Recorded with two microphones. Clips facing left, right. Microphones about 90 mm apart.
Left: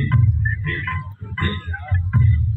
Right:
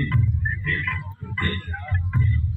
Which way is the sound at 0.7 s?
35° left (ahead or behind).